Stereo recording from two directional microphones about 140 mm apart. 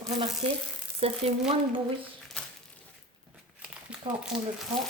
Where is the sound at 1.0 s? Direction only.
45° right (ahead or behind).